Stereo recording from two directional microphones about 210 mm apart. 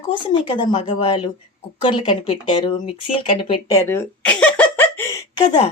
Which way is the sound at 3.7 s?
10° left (ahead or behind).